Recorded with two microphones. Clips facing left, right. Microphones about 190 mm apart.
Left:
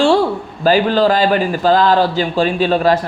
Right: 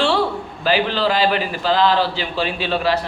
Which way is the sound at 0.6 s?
45° left (ahead or behind).